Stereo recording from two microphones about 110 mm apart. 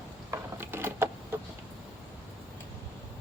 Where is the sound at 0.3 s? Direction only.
20° right (ahead or behind).